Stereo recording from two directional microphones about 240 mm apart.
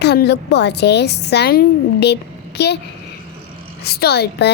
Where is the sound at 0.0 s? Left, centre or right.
Left.